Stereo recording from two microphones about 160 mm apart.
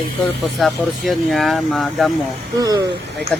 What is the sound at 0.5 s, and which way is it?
Speech, centre (ahead or behind).